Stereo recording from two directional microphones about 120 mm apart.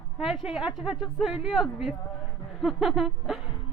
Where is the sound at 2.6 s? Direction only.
Centre (ahead or behind).